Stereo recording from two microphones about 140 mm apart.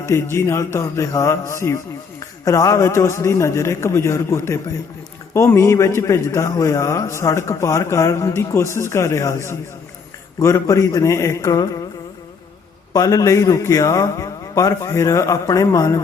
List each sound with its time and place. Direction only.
0.0 s a man's voice: 20° left (ahead or behind)
12.9 s a man's voice: 25° left (ahead or behind)